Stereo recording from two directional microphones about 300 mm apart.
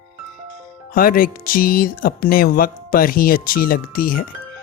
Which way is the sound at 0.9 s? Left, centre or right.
Left.